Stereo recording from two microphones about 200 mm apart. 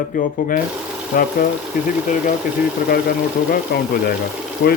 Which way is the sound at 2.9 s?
45° left (ahead or behind).